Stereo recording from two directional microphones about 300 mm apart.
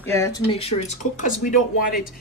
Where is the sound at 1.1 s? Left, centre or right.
Left.